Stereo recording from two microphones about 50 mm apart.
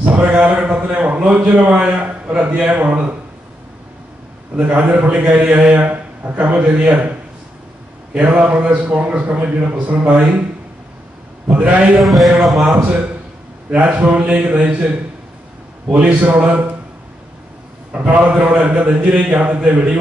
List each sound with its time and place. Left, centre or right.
0.0 s speech: right
4.6 s a man's voice: right
11.4 s speech: right
12.0 s speech: centre
13.7 s speech: right
17.9 s speech: right